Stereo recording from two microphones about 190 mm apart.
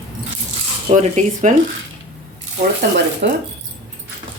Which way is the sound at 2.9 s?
60° right (ahead or behind).